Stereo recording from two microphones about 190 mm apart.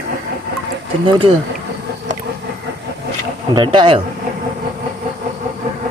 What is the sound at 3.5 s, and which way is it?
Speech, 25° right (ahead or behind).